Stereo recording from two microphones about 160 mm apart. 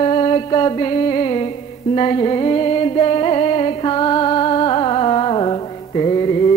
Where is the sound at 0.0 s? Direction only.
35° left (ahead or behind).